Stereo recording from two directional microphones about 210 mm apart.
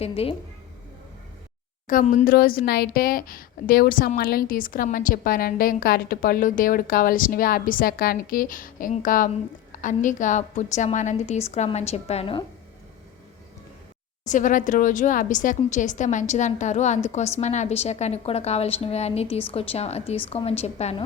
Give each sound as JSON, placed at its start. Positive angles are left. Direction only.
{"t": 0.0, "sound": "speech", "side_deg": 30}
{"t": 1.9, "sound": "a woman's voice", "side_deg": 40}
{"t": 14.3, "sound": "speech", "side_deg": 35}